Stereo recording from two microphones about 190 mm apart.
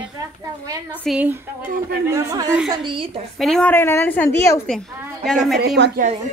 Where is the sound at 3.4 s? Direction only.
5° left (ahead or behind).